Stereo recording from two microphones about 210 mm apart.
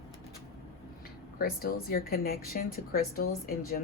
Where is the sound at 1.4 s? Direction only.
45° left (ahead or behind).